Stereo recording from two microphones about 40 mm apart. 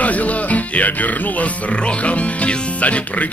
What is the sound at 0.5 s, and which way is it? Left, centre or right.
Music, left.